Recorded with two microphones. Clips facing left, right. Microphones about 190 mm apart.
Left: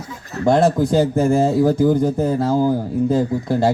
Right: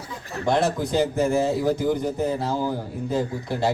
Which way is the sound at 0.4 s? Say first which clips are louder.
Left 7 dB; 50° left (ahead or behind).